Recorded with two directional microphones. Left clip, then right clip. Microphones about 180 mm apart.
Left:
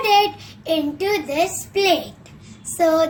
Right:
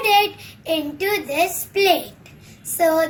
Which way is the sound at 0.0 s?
40° left (ahead or behind).